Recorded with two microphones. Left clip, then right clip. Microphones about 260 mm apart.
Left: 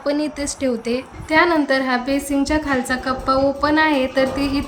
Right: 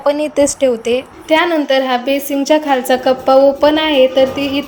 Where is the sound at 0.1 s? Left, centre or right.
Centre.